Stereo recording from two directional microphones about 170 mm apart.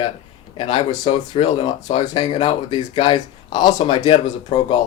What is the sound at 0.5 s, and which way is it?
Speech, 30° left (ahead or behind).